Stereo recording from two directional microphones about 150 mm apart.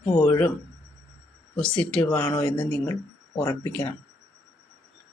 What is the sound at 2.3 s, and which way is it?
Speech, 30° left (ahead or behind).